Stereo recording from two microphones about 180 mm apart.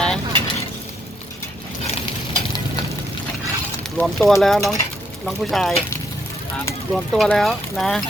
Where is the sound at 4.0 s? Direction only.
Centre (ahead or behind).